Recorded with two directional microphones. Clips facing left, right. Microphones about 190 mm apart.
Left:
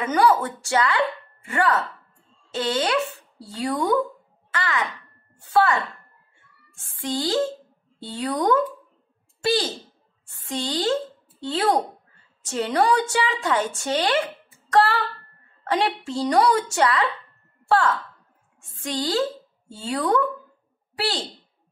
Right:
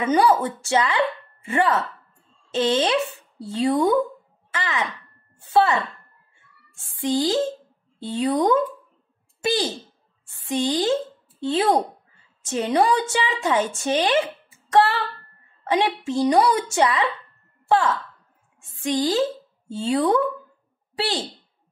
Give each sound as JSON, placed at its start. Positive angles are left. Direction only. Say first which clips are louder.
{"t": 0.0, "sound": "a woman's voice", "louder": "right 1 dB", "side_deg": -25}
{"t": 7.0, "sound": "a woman's voice", "louder": "right 2 dB", "side_deg": -15}
{"t": 18.8, "sound": "a woman's voice", "louder": "right 3 dB", "side_deg": -15}